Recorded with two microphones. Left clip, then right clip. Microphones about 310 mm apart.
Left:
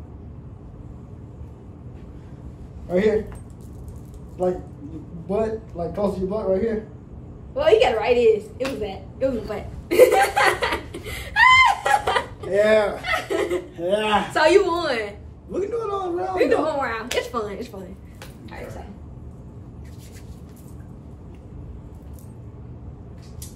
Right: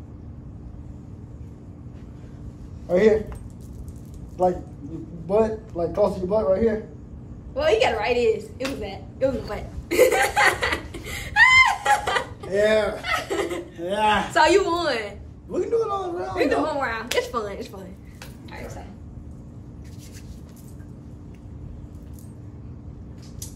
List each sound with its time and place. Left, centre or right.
2.9 s a man's voice: right
5.3 s a man's voice: right
7.5 s a sound: centre
12.6 s speech: left
13.0 s speech: centre